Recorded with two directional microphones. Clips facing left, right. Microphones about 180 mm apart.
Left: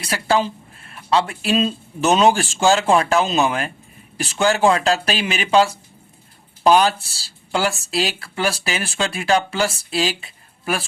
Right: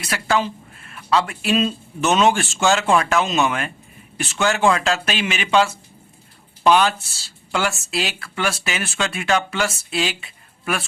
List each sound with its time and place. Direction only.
0.0 s speech: 30° left (ahead or behind)